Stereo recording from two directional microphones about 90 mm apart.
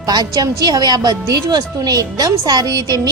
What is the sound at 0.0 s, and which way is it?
A woman's voice, 45° right (ahead or behind).